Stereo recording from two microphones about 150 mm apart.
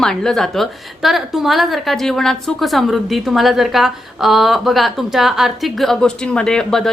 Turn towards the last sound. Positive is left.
turn(degrees=5)  # may be behind; listen again after turning